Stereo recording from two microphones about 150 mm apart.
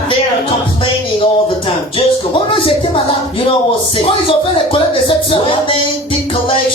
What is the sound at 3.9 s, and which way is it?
Speech, 35° left (ahead or behind).